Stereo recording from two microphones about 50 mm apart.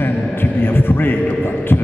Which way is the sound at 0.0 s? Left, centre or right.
Left.